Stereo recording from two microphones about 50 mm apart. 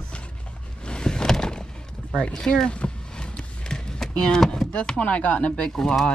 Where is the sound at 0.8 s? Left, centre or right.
Centre.